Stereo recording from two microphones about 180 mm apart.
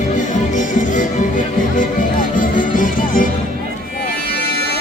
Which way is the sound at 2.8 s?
50° left (ahead or behind).